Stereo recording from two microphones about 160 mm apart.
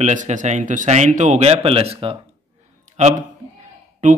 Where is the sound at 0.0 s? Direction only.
50° right (ahead or behind).